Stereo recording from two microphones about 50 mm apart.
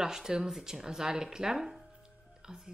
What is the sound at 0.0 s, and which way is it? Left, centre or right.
Speech, centre.